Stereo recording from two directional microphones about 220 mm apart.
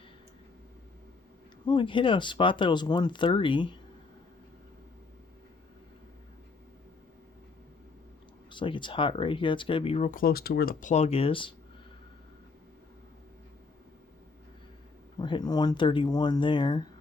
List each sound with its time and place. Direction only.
1.6 s speech: 20° left (ahead or behind)
8.4 s speech: 20° left (ahead or behind)
15.2 s speech: 20° left (ahead or behind)